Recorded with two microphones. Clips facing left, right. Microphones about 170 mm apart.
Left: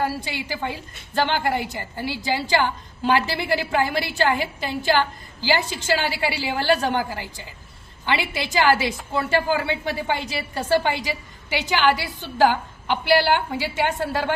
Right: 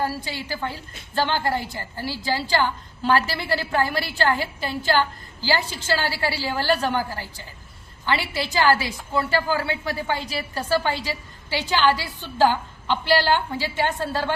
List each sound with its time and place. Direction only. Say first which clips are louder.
0.0 s a woman's voice: left 1 dB; 15° left (ahead or behind)